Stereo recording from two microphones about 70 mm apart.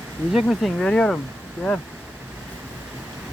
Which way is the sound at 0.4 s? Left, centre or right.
Centre.